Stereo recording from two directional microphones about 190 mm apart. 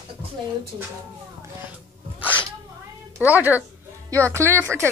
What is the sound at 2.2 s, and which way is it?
Sneeze, 10° left (ahead or behind).